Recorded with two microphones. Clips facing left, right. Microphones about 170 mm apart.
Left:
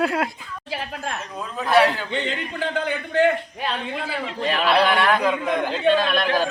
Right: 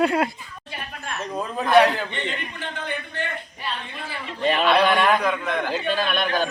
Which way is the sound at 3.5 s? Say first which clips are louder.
Left 6 dB; 90° left.